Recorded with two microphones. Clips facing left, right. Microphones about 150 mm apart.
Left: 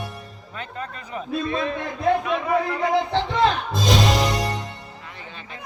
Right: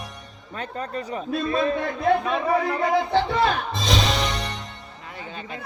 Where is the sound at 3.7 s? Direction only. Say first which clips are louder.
Left 3 dB; centre (ahead or behind).